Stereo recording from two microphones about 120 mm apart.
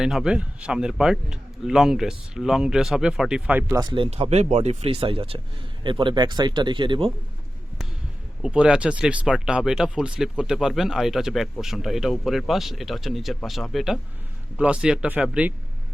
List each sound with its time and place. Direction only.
0.0 s a man's voice: 5° right (ahead or behind)
3.8 s speech: 40° right (ahead or behind)
4.3 s speech: 65° right (ahead or behind); by 7.1 s 40° right (ahead or behind)
8.4 s a man's voice: 5° right (ahead or behind)